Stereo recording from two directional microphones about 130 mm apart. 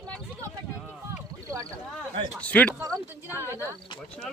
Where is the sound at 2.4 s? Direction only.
10° left (ahead or behind).